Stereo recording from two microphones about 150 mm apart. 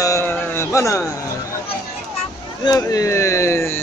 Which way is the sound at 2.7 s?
25° left (ahead or behind).